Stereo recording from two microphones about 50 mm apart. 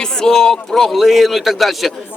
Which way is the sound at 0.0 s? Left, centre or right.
Centre.